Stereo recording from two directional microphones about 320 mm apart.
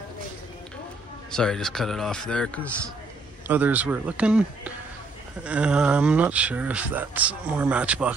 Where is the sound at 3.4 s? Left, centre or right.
Centre.